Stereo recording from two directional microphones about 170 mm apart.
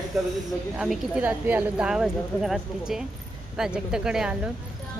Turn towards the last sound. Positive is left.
turn(degrees=-5)  # may be behind; listen again after turning